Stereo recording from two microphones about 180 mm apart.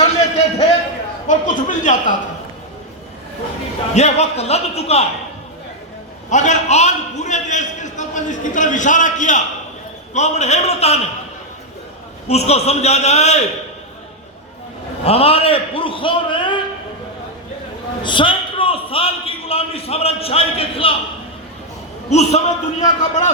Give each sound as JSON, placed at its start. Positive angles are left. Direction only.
{"t": 0.0, "sound": "a sound", "side_deg": 35}
{"t": 3.9, "sound": "a man's voice", "side_deg": 35}
{"t": 6.3, "sound": "a man's voice", "side_deg": 40}
{"t": 12.3, "sound": "a man's voice", "side_deg": 35}
{"t": 15.0, "sound": "a man's voice", "side_deg": 35}
{"t": 18.0, "sound": "a man's voice", "side_deg": 25}
{"t": 22.1, "sound": "a man's voice", "side_deg": 40}